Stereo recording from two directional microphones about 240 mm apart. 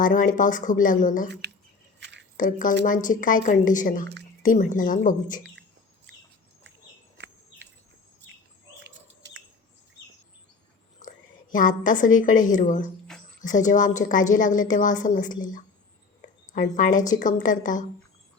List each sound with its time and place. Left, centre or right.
0.0 s a woman's voice: left
2.0 s chewing: right
2.4 s a woman's voice: left
8.8 s bird: right
11.0 s whispering: left
11.5 s a woman's voice: left